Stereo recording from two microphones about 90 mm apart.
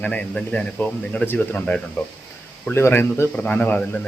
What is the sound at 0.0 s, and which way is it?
Speech, 15° left (ahead or behind).